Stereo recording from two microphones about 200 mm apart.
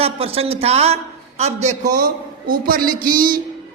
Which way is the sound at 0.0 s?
30° right (ahead or behind).